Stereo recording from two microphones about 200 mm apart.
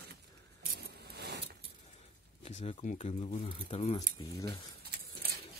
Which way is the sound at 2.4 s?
35° left (ahead or behind).